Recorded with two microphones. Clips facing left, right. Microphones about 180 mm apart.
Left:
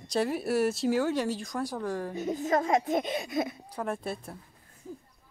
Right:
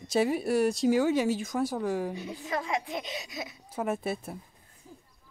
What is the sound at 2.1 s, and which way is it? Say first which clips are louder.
Speech: left 6 dB; 45° left (ahead or behind).